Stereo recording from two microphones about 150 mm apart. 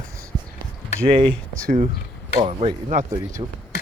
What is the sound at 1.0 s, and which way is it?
Speech, 35° right (ahead or behind).